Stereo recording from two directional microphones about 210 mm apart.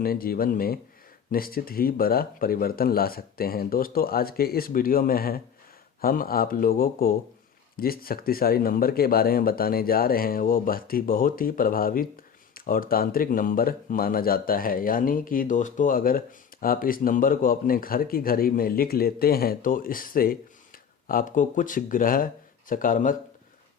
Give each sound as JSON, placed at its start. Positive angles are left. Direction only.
{"t": 0.0, "sound": "speech", "side_deg": 45}